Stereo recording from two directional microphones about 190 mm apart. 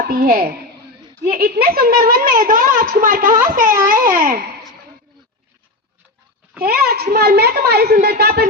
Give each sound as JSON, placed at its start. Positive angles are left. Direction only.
{"t": 0.0, "sound": "a woman's voice", "side_deg": -50}
{"t": 6.6, "sound": "a child's voice", "side_deg": -55}